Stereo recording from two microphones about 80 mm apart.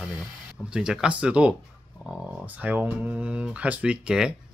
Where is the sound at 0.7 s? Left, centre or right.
Centre.